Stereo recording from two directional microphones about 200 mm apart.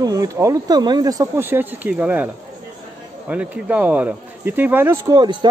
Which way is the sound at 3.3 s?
5° right (ahead or behind).